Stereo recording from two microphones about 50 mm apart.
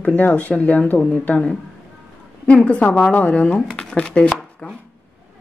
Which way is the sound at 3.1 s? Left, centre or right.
Left.